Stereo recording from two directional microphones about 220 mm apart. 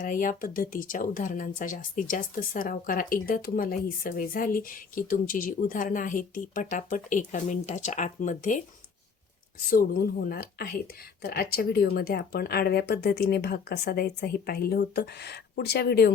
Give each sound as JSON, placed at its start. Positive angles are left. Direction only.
{"t": 0.0, "sound": "speech", "side_deg": 40}
{"t": 9.6, "sound": "speech", "side_deg": 40}